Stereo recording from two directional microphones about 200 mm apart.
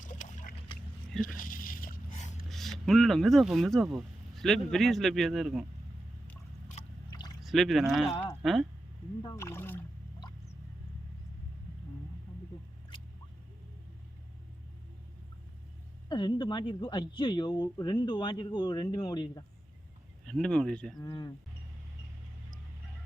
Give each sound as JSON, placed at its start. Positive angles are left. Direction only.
{"t": 0.0, "sound": "boat", "side_deg": 40}
{"t": 1.2, "sound": "a sound", "side_deg": 45}
{"t": 2.5, "sound": "speech", "side_deg": 0}
{"t": 7.4, "sound": "speech", "side_deg": 0}
{"t": 9.2, "sound": "speech", "side_deg": 15}
{"t": 16.0, "sound": "speech", "side_deg": 25}
{"t": 20.2, "sound": "speech", "side_deg": 5}
{"t": 21.0, "sound": "speech", "side_deg": 20}